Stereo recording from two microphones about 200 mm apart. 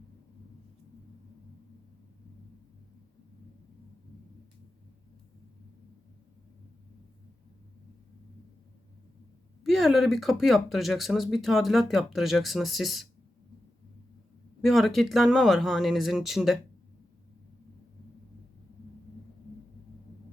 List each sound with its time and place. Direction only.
9.6 s speech: centre (ahead or behind)
14.6 s speech: centre (ahead or behind)